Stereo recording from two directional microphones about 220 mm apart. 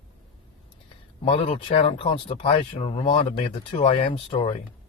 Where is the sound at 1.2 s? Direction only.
20° left (ahead or behind).